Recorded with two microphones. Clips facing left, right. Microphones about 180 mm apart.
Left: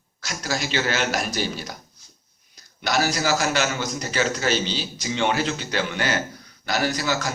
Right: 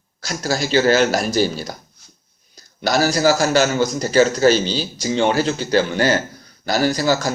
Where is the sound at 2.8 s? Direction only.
35° right (ahead or behind).